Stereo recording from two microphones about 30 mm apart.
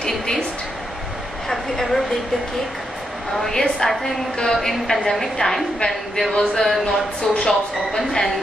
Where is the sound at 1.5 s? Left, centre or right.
Centre.